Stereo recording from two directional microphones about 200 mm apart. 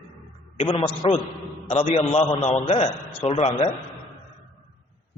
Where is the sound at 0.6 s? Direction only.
25° left (ahead or behind).